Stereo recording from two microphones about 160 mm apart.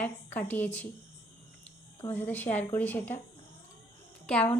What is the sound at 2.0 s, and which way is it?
A woman's voice, 10° left (ahead or behind).